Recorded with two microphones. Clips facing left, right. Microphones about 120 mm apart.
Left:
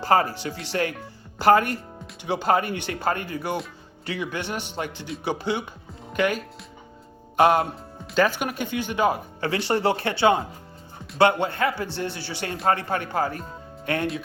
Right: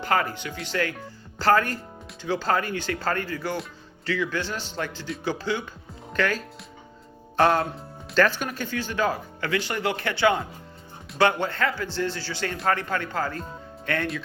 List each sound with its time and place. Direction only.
0.0 s speech: 30° left (ahead or behind)
4.4 s speech: 60° left (ahead or behind)
5.2 s speech: 20° left (ahead or behind)
6.1 s music: 20° left (ahead or behind)
8.1 s speech: 10° left (ahead or behind)